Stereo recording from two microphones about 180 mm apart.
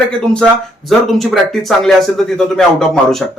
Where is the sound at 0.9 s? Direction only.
Centre (ahead or behind).